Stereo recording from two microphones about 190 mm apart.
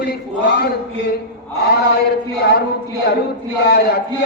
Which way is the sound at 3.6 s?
55° left (ahead or behind).